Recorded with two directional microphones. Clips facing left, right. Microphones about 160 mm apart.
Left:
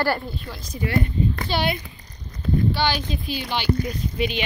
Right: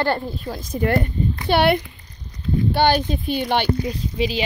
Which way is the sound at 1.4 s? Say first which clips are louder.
Right 7 dB; 60° right (ahead or behind).